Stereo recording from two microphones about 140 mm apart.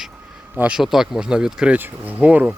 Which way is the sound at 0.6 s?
5° right (ahead or behind).